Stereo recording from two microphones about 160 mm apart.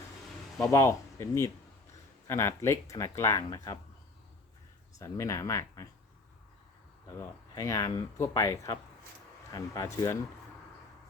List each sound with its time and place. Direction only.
0.7 s speech: 20° left (ahead or behind)
4.9 s speech: 20° left (ahead or behind)
7.2 s speech: 20° left (ahead or behind)